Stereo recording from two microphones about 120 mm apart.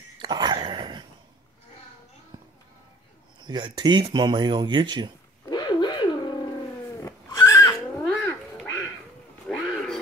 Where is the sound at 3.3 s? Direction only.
40° right (ahead or behind).